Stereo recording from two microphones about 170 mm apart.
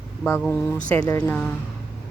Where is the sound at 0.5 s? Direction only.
10° left (ahead or behind).